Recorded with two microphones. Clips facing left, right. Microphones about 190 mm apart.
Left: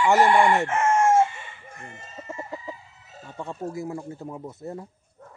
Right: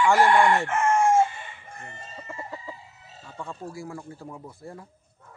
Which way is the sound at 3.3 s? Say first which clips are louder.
Left 5 dB; 20° left (ahead or behind).